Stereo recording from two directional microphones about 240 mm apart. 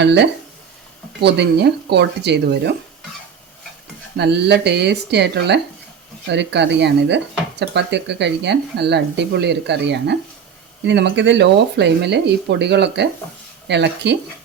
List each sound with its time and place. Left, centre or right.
0.0 s speech: right
4.2 s speech: right